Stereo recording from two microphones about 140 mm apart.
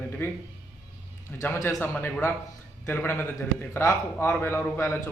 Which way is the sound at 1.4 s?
15° left (ahead or behind).